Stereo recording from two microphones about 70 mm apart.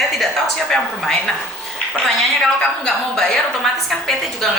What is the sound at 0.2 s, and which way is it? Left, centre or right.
A woman's voice, centre.